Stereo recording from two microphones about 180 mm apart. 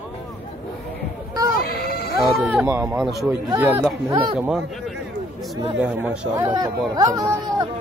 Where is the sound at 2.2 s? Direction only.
Centre (ahead or behind).